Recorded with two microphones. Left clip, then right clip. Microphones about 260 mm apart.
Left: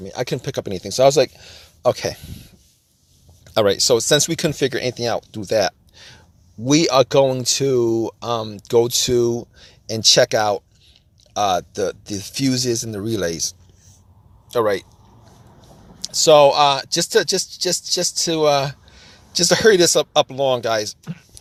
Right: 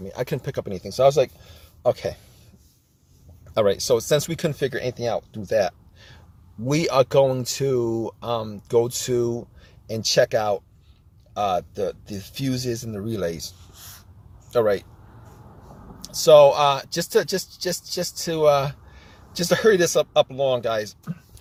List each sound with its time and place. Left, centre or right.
0.0 s speech: left
3.5 s speech: left
14.5 s speech: centre
16.0 s speech: left